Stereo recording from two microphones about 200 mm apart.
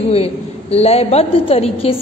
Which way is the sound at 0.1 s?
30° left (ahead or behind).